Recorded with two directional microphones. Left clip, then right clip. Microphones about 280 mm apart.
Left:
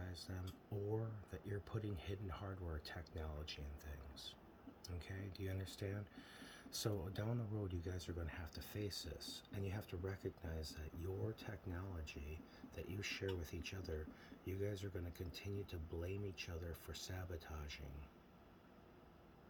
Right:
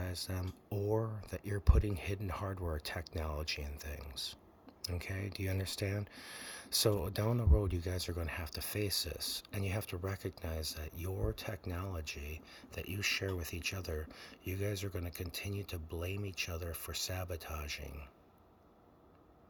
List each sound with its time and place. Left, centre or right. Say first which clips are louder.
0.0 s speech: right 11 dB; right
14.6 s speech: right 7 dB; right